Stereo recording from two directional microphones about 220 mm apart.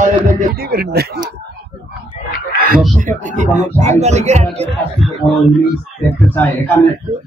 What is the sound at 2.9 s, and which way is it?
A man's voice, 35° right (ahead or behind).